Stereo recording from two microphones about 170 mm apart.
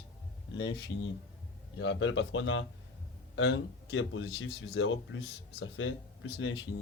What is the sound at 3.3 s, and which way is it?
Speech, 90° left.